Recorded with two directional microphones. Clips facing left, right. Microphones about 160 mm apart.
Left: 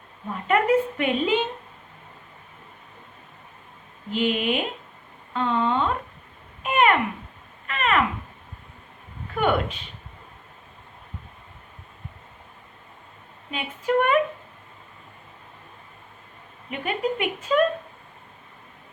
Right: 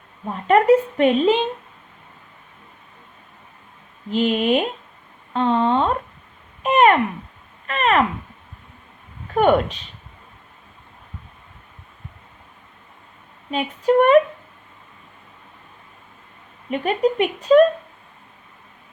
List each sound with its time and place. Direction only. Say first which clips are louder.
0.4 s a woman's voice: right 6 dB; 40° right (ahead or behind)
4.1 s speech: right 5 dB; 40° right (ahead or behind)
6.6 s a sound: right 5 dB; 40° right (ahead or behind)
9.3 s speech: right 7 dB; 40° right (ahead or behind)
13.5 s speech: right 6 dB; 35° right (ahead or behind)
16.8 s speech: right 6 dB; 40° right (ahead or behind)